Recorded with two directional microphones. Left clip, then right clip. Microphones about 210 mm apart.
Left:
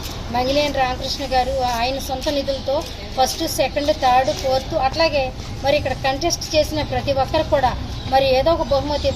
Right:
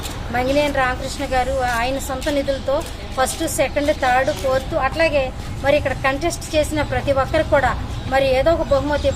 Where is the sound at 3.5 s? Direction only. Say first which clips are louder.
Right 3 dB; centre (ahead or behind).